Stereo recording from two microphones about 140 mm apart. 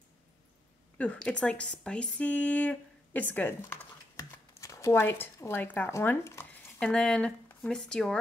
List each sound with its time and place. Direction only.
0.9 s speech: 10° left (ahead or behind)
6.8 s speech: 5° left (ahead or behind)